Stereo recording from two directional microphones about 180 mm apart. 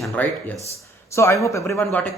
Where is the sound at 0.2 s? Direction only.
10° left (ahead or behind).